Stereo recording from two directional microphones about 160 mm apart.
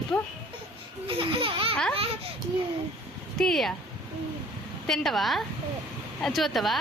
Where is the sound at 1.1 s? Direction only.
35° right (ahead or behind).